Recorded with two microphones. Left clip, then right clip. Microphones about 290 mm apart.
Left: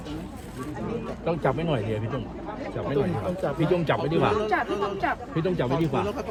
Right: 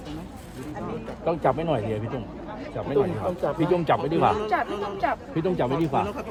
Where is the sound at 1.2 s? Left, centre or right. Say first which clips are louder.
Right 3 dB; right.